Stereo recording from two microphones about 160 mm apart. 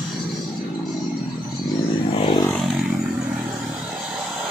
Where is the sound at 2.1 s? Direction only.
35° left (ahead or behind).